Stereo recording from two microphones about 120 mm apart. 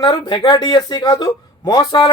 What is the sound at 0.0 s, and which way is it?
Speech, 40° left (ahead or behind).